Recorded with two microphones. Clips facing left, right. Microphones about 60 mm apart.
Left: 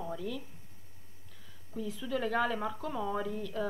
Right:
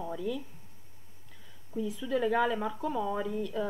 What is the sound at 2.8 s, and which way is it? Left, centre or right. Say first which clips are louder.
Speech: right 4 dB; centre.